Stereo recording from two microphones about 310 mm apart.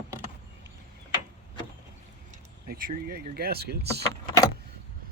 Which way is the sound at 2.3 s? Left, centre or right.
Right.